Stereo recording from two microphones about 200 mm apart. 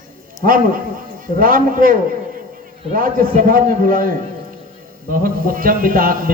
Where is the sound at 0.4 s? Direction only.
45° right (ahead or behind).